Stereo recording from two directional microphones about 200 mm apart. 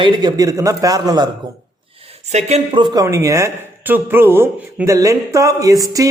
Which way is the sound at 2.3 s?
30° right (ahead or behind).